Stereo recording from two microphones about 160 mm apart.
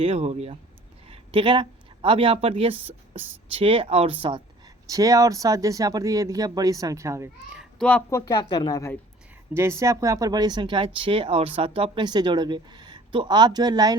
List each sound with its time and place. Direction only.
0.0 s speech: 40° right (ahead or behind)
4.9 s speech: 20° right (ahead or behind)
7.5 s a sound: centre (ahead or behind)
8.1 s speech: 25° left (ahead or behind)
9.6 s speech: 15° right (ahead or behind)